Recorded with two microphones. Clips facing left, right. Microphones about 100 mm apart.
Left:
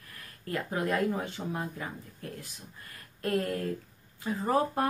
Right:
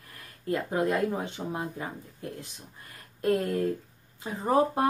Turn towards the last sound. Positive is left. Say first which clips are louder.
# right 3 dB
turn(degrees=-20)  # may be behind; listen again after turning